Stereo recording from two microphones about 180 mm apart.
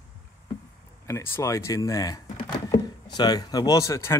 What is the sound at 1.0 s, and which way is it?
Speech, 15° left (ahead or behind).